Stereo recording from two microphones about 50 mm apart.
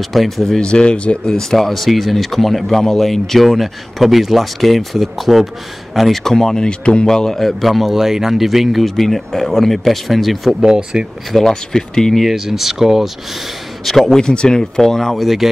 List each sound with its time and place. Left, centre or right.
0.0 s speech: centre
0.6 s speech: centre
10.6 s speech: centre
11.3 s speech: centre
13.8 s speech: centre
14.2 s speech: centre
15.1 s speech: centre